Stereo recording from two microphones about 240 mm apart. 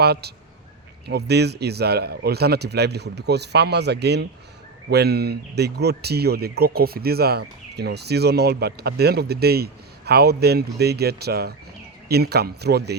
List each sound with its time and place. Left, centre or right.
0.0 s a man's voice: right